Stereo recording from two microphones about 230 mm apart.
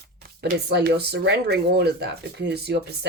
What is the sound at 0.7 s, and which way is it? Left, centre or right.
Speech, right.